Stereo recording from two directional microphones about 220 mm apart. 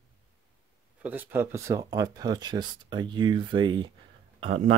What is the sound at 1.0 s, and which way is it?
Speech, 5° right (ahead or behind).